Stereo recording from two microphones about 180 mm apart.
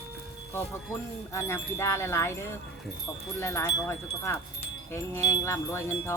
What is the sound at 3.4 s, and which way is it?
Wind chime, 15° left (ahead or behind).